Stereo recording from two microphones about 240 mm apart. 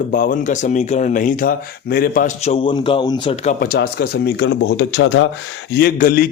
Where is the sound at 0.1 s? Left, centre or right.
Left.